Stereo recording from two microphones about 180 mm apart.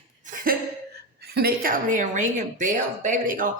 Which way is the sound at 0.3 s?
50° right (ahead or behind).